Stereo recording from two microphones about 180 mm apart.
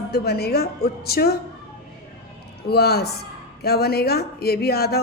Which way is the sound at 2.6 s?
60° left (ahead or behind).